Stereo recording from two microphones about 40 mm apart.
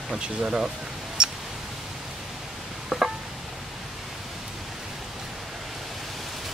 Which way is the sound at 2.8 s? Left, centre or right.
Centre.